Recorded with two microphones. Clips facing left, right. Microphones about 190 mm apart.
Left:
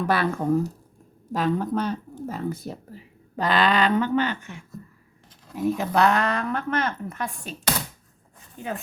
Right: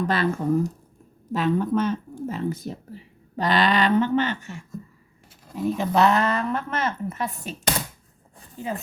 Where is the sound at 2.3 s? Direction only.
55° left (ahead or behind).